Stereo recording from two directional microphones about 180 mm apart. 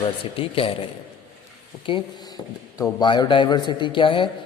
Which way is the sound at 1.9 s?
30° left (ahead or behind).